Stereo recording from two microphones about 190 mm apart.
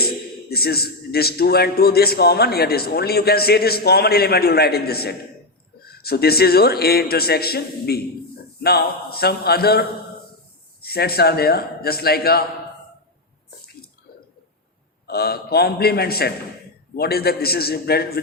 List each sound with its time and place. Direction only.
0.5 s a man's voice: 55° left (ahead or behind)
15.0 s a man's voice: 55° left (ahead or behind)